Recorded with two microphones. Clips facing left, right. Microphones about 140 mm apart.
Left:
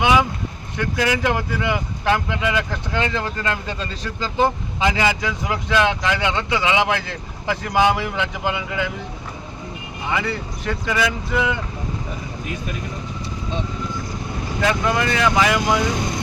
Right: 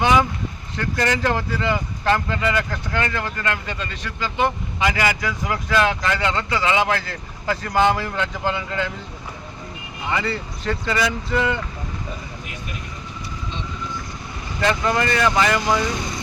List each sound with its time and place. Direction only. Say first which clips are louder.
0.0 s speech: even; 5° left (ahead or behind); by 4.5 s 35° left (ahead or behind)
4.8 s speech: left 2 dB; 20° left (ahead or behind)
10.1 s speech: even; 10° left (ahead or behind)
14.6 s speech: even; 5° left (ahead or behind)